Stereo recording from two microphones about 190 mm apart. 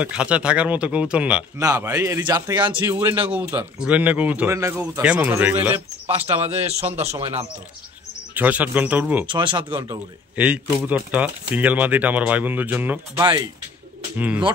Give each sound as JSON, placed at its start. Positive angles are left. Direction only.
{"t": 0.0, "sound": "speech", "side_deg": -5}
{"t": 2.7, "sound": "speech", "side_deg": -10}
{"t": 6.8, "sound": "speech", "side_deg": -35}
{"t": 8.4, "sound": "speech", "side_deg": -10}
{"t": 9.2, "sound": "speech", "side_deg": -25}
{"t": 9.7, "sound": "speech", "side_deg": -10}
{"t": 13.2, "sound": "speech", "side_deg": -20}
{"t": 14.1, "sound": "speech", "side_deg": -10}